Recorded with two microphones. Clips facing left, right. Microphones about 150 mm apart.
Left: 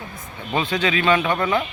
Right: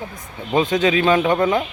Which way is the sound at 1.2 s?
20° right (ahead or behind).